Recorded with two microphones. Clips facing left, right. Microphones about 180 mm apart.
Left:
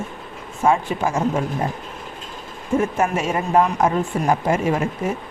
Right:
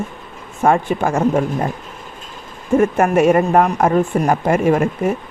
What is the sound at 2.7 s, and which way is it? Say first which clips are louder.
Speech: right 6 dB; 60° right (ahead or behind).